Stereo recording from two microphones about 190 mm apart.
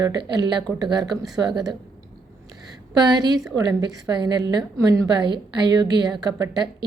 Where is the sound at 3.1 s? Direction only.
20° right (ahead or behind).